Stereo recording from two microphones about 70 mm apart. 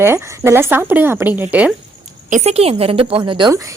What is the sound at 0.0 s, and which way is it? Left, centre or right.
Speech, right.